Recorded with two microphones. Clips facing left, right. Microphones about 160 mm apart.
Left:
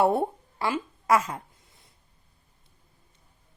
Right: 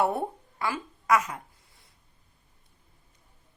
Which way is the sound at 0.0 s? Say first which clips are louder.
Left 4 dB; 30° left (ahead or behind).